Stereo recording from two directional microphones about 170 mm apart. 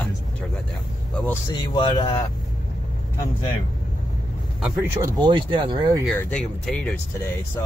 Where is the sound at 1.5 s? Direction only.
25° left (ahead or behind).